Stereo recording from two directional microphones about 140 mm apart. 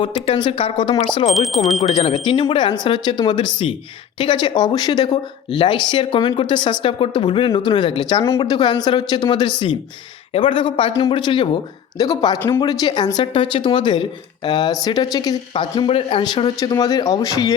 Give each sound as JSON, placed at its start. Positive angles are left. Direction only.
{"t": 0.3, "sound": "speech", "side_deg": 40}
{"t": 1.3, "sound": "speech", "side_deg": 0}
{"t": 1.7, "sound": "speech", "side_deg": 50}
{"t": 15.9, "sound": "speech", "side_deg": 40}